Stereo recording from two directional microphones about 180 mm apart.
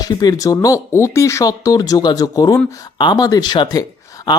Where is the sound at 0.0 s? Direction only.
20° left (ahead or behind).